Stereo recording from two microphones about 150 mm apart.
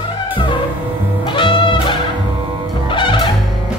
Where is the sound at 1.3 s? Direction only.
35° left (ahead or behind).